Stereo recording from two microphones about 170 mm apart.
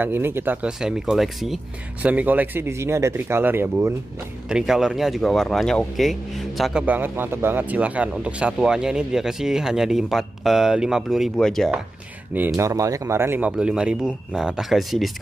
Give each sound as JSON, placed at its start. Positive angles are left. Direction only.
{"t": 0.0, "sound": "speech", "side_deg": -15}
{"t": 12.5, "sound": "speech", "side_deg": -20}